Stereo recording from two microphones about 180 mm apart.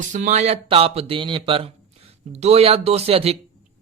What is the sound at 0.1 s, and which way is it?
A man's voice, 40° right (ahead or behind).